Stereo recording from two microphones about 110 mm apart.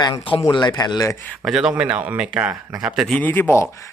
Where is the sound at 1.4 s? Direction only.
5° right (ahead or behind).